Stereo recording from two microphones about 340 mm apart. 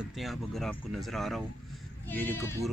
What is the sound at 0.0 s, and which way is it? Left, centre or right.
Speech, centre.